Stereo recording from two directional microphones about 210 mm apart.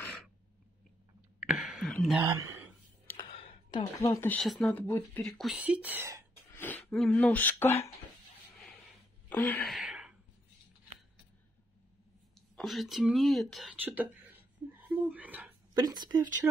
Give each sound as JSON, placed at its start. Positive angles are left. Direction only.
{"t": 1.4, "sound": "a sound", "side_deg": -5}
{"t": 2.2, "sound": "speech", "side_deg": -15}
{"t": 3.3, "sound": "a sound", "side_deg": 30}
{"t": 4.1, "sound": "speech", "side_deg": 10}
{"t": 6.5, "sound": "speech", "side_deg": 10}
{"t": 9.3, "sound": "wail", "side_deg": 10}
{"t": 9.8, "sound": "a sound", "side_deg": -5}
{"t": 12.4, "sound": "speech", "side_deg": 0}
{"t": 15.7, "sound": "speech", "side_deg": -20}